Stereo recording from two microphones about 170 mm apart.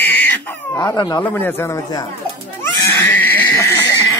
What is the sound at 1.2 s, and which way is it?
Speech, 10° left (ahead or behind).